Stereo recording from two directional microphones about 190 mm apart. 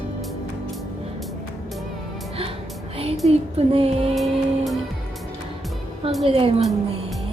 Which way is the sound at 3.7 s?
30° right (ahead or behind).